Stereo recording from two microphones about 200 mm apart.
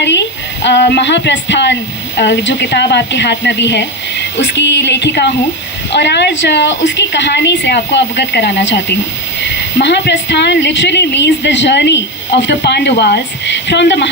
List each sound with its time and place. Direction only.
0.0 s a woman's voice: 65° left (ahead or behind)